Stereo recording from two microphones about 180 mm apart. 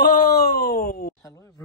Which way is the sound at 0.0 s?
65° left (ahead or behind).